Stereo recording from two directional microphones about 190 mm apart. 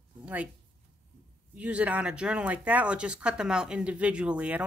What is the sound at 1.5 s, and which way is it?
Speech, 5° right (ahead or behind).